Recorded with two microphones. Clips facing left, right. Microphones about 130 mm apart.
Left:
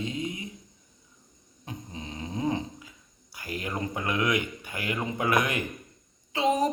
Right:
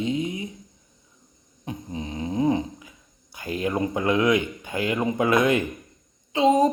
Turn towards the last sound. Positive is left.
turn(degrees=-25)  # may be behind; listen again after turning